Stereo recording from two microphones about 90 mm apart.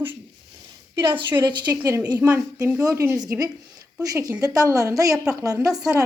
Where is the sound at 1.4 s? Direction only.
50° right (ahead or behind).